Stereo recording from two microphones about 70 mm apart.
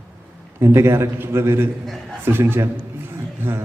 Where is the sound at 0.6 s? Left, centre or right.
Right.